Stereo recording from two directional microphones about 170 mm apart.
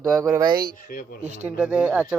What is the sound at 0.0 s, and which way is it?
Speech, 20° right (ahead or behind).